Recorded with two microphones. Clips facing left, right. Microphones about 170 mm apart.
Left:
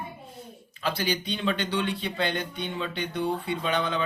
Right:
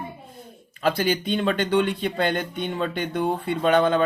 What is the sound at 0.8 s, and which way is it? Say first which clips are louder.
Speech: right 6 dB; 50° right (ahead or behind).